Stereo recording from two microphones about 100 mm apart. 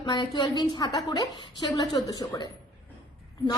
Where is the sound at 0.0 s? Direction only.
50° left (ahead or behind).